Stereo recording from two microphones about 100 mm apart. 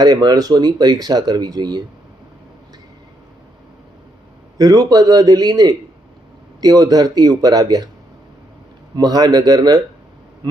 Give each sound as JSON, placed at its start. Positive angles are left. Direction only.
{"t": 0.0, "sound": "speech", "side_deg": -45}
{"t": 4.5, "sound": "speech", "side_deg": -40}
{"t": 9.0, "sound": "speech", "side_deg": -45}